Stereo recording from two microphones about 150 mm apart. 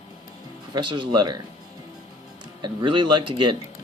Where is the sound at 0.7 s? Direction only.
30° right (ahead or behind).